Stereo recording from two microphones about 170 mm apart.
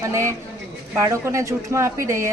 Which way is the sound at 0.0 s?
15° right (ahead or behind).